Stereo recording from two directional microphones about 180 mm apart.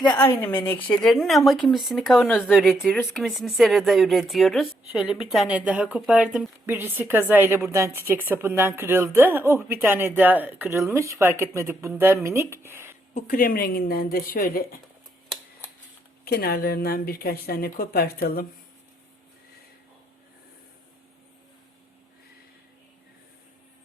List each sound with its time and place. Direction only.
0.5 s speech: 10° left (ahead or behind)
2.7 s speech: 10° left (ahead or behind); by 13.0 s 15° right (ahead or behind)
13.1 s a woman's voice: 50° left (ahead or behind)
16.2 s a woman's voice: 60° left (ahead or behind)